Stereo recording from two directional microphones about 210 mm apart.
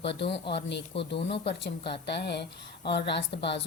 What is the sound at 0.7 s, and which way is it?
Speech, 55° left (ahead or behind).